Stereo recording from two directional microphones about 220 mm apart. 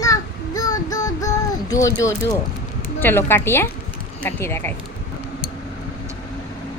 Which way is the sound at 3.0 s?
10° left (ahead or behind).